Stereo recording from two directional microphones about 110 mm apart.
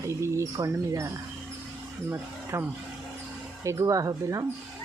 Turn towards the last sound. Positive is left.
turn(degrees=-30)  # may be behind; listen again after turning